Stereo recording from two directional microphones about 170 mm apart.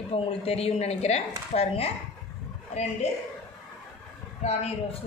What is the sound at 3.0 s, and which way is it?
Speech, 40° left (ahead or behind).